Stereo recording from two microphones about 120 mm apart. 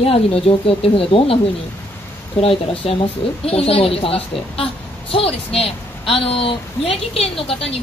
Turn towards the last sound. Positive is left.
turn(degrees=55)  # may be behind; listen again after turning